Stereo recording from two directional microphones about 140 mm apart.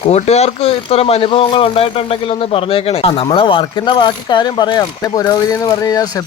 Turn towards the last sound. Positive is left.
turn(degrees=25)  # may be behind; listen again after turning